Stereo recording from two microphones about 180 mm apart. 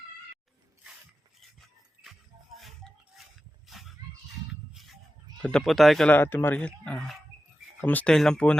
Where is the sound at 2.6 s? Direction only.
Centre (ahead or behind).